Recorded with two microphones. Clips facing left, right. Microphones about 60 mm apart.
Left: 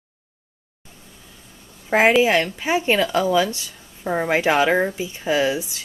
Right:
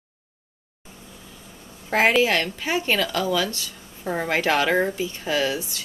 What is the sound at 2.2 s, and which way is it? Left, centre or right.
Speech, centre.